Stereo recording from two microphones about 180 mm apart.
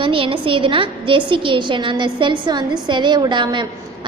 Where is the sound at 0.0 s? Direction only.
30° right (ahead or behind).